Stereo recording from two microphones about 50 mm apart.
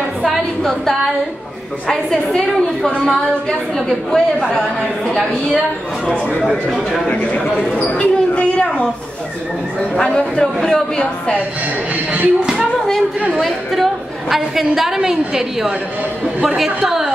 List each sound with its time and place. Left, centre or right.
0.6 s a woman's voice: centre
7.8 s a sound: left
10.4 s a woman's voice: centre
11.9 s speech: right
13.4 s a woman's voice: centre